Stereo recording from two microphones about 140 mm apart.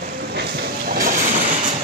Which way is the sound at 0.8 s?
80° right.